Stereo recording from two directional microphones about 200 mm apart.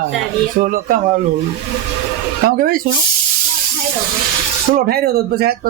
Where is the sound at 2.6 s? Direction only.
45° right (ahead or behind).